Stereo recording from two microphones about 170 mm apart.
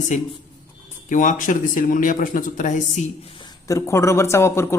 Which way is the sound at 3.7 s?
15° left (ahead or behind).